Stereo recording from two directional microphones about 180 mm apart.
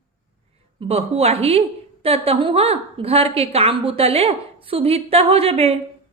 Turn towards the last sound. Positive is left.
turn(degrees=-35)  # may be behind; listen again after turning